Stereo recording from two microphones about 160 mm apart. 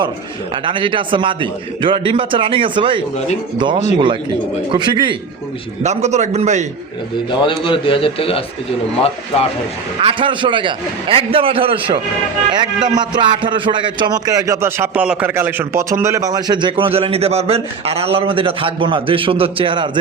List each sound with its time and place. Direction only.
0.5 s a man's voice: 30° right (ahead or behind)
5.8 s a man's voice: 45° right (ahead or behind)
7.3 s a man's voice: 30° left (ahead or behind)
10.0 s speech: 35° right (ahead or behind)